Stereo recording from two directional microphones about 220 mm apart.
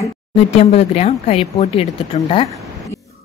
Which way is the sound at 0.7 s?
30° left (ahead or behind).